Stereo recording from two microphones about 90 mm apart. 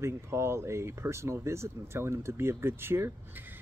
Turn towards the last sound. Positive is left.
turn(degrees=-25)  # may be behind; listen again after turning